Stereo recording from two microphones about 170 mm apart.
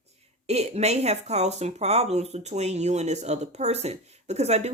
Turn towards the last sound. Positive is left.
turn(degrees=-40)  # may be behind; listen again after turning